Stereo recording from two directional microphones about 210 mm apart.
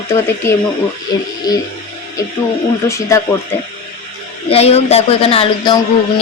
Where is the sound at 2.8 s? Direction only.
15° left (ahead or behind).